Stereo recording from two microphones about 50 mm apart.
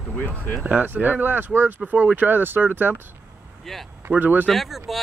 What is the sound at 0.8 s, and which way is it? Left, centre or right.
Speech, right.